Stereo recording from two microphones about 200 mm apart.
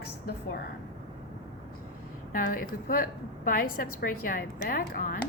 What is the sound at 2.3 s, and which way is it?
A woman's voice, 45° left (ahead or behind).